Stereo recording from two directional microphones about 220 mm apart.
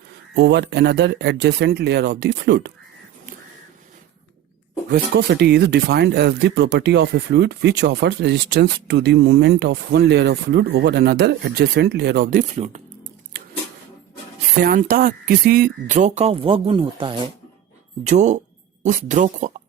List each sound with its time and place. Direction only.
0.3 s speech: 50° right (ahead or behind)
4.9 s speech: 50° right (ahead or behind); by 12.8 s 30° right (ahead or behind)
13.3 s a sound: 40° right (ahead or behind)
14.6 s speech: 40° right (ahead or behind)